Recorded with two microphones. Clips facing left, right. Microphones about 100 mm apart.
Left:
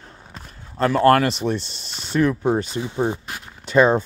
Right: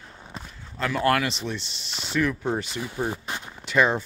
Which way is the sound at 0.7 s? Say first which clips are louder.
Left 8 dB; 40° left (ahead or behind).